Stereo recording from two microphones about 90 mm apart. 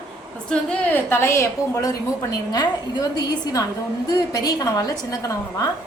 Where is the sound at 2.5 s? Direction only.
55° left (ahead or behind).